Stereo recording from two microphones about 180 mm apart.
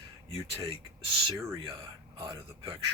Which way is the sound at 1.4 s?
15° right (ahead or behind).